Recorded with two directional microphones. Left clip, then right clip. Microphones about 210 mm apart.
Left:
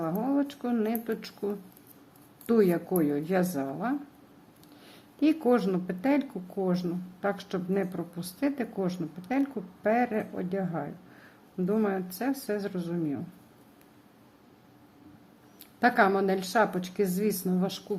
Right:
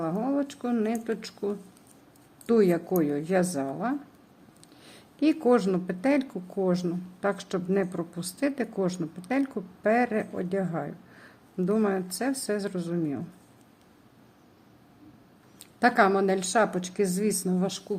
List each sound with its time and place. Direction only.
0.0 s speech: 10° right (ahead or behind)
15.8 s speech: 15° right (ahead or behind)